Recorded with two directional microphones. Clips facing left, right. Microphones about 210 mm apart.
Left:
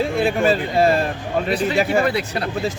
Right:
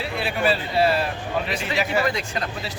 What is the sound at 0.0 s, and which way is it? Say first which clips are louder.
A man's voice: left 6 dB; 45° left (ahead or behind).